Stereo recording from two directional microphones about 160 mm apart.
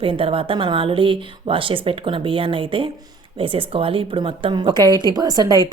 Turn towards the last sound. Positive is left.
turn(degrees=-25)  # may be behind; listen again after turning